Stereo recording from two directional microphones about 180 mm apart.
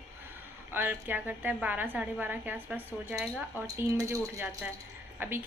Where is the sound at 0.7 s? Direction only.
10° right (ahead or behind).